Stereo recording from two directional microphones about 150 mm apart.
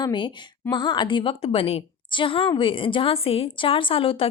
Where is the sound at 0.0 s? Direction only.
30° left (ahead or behind).